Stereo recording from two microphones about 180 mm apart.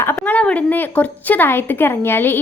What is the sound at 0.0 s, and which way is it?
A woman's voice, 10° left (ahead or behind).